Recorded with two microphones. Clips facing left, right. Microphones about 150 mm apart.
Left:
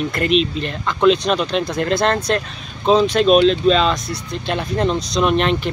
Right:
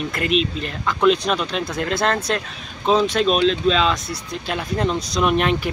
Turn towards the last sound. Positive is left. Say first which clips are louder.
# left 2 dB
turn(degrees=-10)  # may be behind; listen again after turning